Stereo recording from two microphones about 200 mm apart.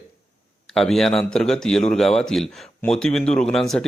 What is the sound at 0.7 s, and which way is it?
A man's voice, centre (ahead or behind).